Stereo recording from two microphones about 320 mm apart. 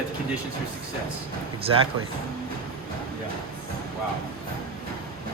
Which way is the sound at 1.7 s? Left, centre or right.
Centre.